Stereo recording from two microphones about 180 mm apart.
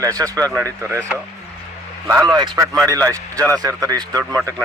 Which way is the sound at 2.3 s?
20° right (ahead or behind).